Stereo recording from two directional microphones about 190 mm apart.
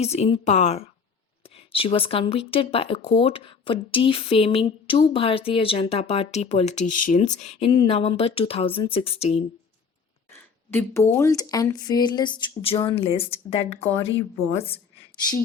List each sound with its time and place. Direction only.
0.0 s speech: 35° left (ahead or behind)
10.3 s speech: 10° left (ahead or behind); by 13.8 s 30° left (ahead or behind)
13.8 s speech: 10° left (ahead or behind)